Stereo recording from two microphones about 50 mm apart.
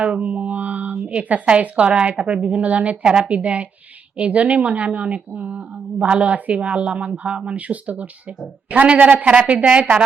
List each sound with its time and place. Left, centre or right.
0.0 s speech: right